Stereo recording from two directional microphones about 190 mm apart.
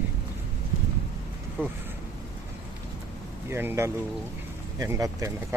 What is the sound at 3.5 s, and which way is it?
Speech, 10° right (ahead or behind).